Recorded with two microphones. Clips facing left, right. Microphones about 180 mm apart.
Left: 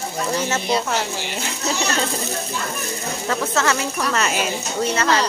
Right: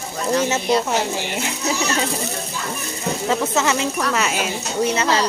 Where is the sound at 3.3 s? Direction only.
15° right (ahead or behind).